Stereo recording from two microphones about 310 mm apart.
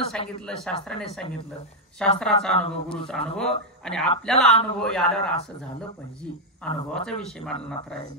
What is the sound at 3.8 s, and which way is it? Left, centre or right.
Speech, centre.